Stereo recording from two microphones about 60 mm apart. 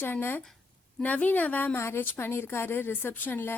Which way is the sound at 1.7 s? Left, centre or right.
Left.